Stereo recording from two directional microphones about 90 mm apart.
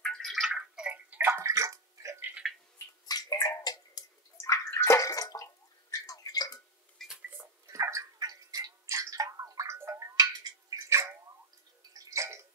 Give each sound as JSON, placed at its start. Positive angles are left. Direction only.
{"t": 0.0, "sound": "gargling", "side_deg": 5}
{"t": 0.5, "sound": "gargling", "side_deg": -10}
{"t": 1.2, "sound": "bathtub", "side_deg": -25}
{"t": 1.5, "sound": "bathtub", "side_deg": -40}
{"t": 2.4, "sound": "a sound", "side_deg": 0}
{"t": 3.1, "sound": "bathtub", "side_deg": 45}
{"t": 4.4, "sound": "bathtub", "side_deg": 30}
{"t": 5.9, "sound": "drip", "side_deg": 40}
{"t": 7.0, "sound": "cash register", "side_deg": 5}
{"t": 7.6, "sound": "gargling", "side_deg": -35}
{"t": 9.8, "sound": "a sound", "side_deg": -35}